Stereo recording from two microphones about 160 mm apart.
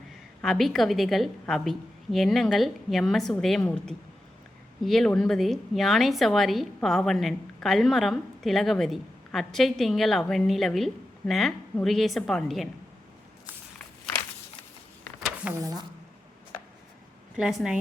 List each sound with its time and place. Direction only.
0.4 s a woman's voice: centre (ahead or behind)
15.6 s a woman's voice: 25° right (ahead or behind)
17.3 s a woman's voice: centre (ahead or behind)